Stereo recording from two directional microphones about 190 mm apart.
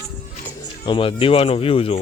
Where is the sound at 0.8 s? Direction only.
25° left (ahead or behind).